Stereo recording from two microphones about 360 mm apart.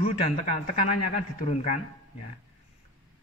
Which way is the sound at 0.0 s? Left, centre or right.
Centre.